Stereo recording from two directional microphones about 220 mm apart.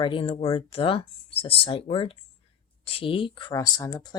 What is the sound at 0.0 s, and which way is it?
Speech, 25° left (ahead or behind).